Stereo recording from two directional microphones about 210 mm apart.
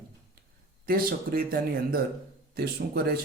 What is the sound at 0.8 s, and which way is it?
Speech, 45° right (ahead or behind).